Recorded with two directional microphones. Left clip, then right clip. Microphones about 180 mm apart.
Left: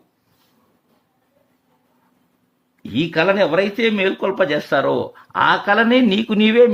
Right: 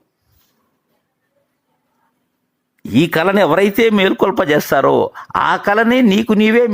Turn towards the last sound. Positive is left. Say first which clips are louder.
# right 1 dB
turn(degrees=-35)  # may be behind; listen again after turning